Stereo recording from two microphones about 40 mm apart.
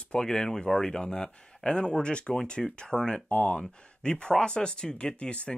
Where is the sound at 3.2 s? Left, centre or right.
Left.